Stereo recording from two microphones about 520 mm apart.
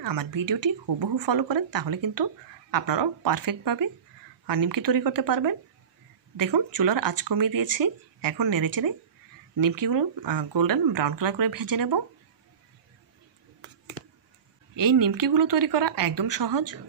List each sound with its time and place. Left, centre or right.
0.0 s speech: right
14.8 s speech: right